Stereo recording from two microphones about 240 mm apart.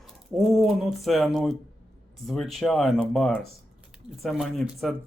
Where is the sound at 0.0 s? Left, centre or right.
Centre.